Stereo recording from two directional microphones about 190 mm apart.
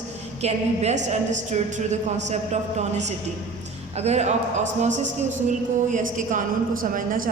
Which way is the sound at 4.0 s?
35° right (ahead or behind).